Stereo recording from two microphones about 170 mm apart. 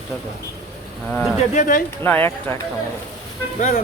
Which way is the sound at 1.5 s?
50° left (ahead or behind).